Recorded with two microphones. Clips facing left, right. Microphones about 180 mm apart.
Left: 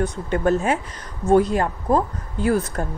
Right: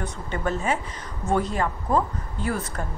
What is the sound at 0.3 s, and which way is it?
Speech, 50° left (ahead or behind).